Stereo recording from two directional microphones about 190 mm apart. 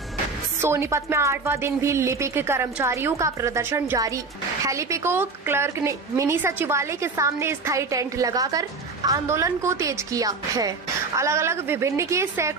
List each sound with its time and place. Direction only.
0.6 s speech: 15° right (ahead or behind)